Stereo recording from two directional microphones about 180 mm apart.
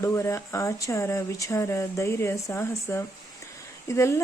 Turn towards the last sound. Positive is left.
turn(degrees=15)  # may be behind; listen again after turning